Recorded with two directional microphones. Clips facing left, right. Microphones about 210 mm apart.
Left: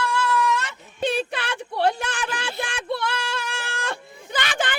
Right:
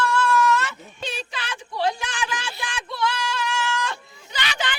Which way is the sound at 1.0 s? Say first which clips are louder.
Left 9 dB; 55° left (ahead or behind).